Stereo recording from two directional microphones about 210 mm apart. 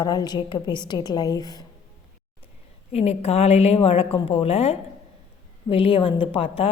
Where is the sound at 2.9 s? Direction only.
30° left (ahead or behind).